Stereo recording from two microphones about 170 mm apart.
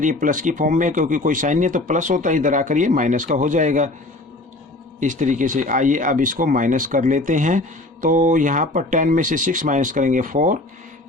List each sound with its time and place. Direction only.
0.0 s speech: 50° right (ahead or behind)
4.9 s speech: 45° right (ahead or behind)